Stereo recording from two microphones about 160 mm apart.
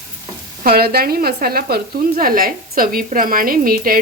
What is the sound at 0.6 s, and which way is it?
A woman's voice, 70° right (ahead or behind).